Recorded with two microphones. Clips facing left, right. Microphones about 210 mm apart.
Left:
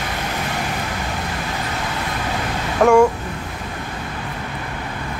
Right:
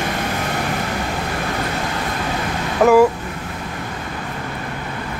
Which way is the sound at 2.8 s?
5° right (ahead or behind).